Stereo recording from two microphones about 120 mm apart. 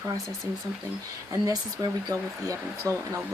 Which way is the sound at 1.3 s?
30° right (ahead or behind).